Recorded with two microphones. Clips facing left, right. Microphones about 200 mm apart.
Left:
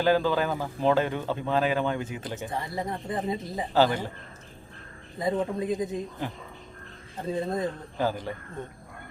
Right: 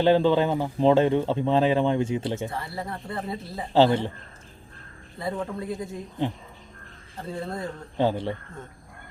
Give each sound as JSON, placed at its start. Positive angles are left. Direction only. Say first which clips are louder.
{"t": 0.0, "sound": "speech", "louder": "right 4 dB", "side_deg": -25}
{"t": 2.5, "sound": "speech", "louder": "left 2 dB", "side_deg": 15}
{"t": 3.8, "sound": "speech", "louder": "right 4 dB", "side_deg": -25}
{"t": 5.2, "sound": "speech", "louder": "left 3 dB", "side_deg": 20}
{"t": 7.2, "sound": "speech", "louder": "left 4 dB", "side_deg": 20}
{"t": 7.9, "sound": "speech", "louder": "right 7 dB", "side_deg": -25}